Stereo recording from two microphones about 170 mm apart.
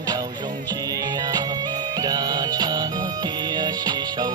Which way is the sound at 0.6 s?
25° right (ahead or behind).